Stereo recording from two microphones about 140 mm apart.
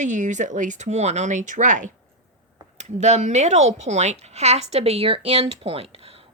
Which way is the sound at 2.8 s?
55° right (ahead or behind).